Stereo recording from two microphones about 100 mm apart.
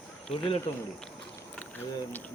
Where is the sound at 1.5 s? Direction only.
20° left (ahead or behind).